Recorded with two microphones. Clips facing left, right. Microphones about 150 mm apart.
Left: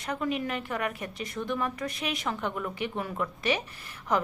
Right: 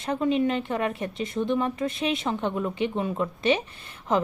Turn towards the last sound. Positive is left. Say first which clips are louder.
# right 3 dB
turn(degrees=-25)  # may be behind; listen again after turning